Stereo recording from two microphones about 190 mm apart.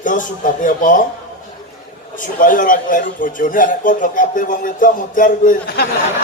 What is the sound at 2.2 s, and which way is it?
A man's voice, 45° left (ahead or behind).